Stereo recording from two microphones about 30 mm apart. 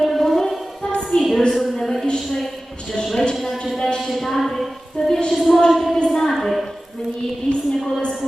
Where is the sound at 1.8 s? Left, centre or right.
Centre.